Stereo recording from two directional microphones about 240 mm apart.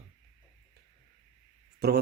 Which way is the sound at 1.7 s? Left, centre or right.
Right.